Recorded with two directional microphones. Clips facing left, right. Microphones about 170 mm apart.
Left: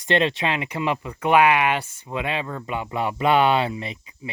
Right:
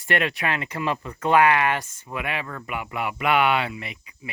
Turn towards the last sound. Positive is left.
turn(degrees=30)  # may be behind; listen again after turning